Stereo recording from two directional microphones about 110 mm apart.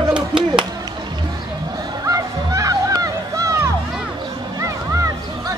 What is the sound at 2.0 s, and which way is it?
Music, 30° right (ahead or behind).